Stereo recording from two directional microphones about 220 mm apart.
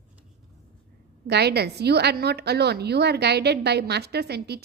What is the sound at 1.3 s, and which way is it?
A woman's voice, 50° right (ahead or behind).